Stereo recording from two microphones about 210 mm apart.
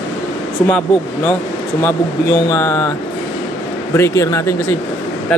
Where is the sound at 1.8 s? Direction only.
15° left (ahead or behind).